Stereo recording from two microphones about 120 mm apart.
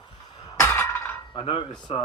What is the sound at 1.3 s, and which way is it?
Cutlery, 45° left (ahead or behind).